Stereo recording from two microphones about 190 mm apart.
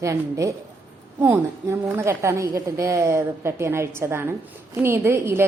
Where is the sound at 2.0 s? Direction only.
15° right (ahead or behind).